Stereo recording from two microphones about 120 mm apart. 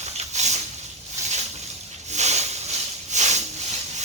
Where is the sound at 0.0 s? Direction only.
70° right (ahead or behind).